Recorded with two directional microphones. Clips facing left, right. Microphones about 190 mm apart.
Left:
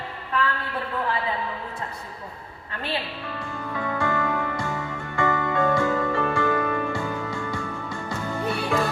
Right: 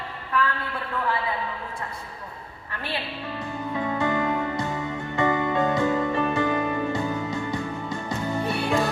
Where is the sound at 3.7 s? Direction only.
20° right (ahead or behind).